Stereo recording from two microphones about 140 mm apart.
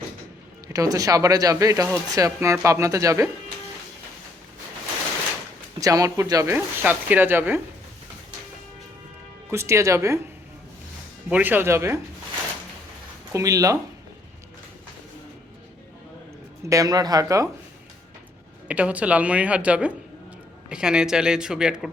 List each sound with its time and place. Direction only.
0.7 s speech: 25° right (ahead or behind)
5.8 s speech: 25° right (ahead or behind)
9.5 s speech: 20° right (ahead or behind)
11.3 s speech: 10° right (ahead or behind)
13.3 s speech: 25° right (ahead or behind)
16.6 s speech: 25° right (ahead or behind)
18.7 s speech: 10° right (ahead or behind)